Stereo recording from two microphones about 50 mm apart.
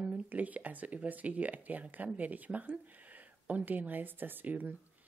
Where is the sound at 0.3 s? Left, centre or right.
Right.